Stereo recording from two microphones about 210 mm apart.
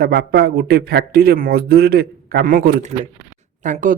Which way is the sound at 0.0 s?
50° right (ahead or behind).